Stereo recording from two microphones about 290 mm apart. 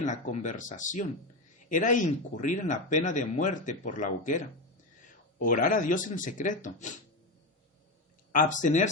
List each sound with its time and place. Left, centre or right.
0.0 s speech: left
8.3 s speech: left